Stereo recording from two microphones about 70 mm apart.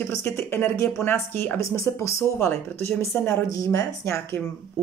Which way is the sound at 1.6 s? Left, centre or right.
Left.